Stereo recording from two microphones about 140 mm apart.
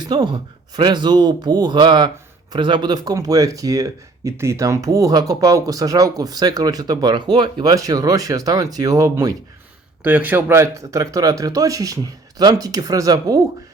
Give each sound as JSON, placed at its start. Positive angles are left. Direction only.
{"t": 0.0, "sound": "speech", "side_deg": -30}